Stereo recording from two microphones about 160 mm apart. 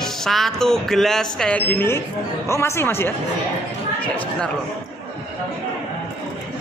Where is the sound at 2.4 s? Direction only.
15° left (ahead or behind).